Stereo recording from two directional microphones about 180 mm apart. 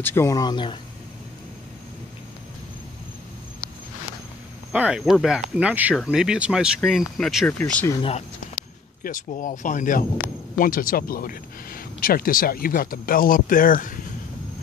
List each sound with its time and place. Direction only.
0.0 s speech: 15° left (ahead or behind)
4.7 s speech: 5° right (ahead or behind)
8.0 s a sound: 30° left (ahead or behind)
9.0 s speech: 45° left (ahead or behind)